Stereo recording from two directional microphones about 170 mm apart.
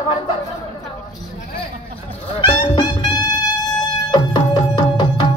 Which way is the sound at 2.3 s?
30° left (ahead or behind).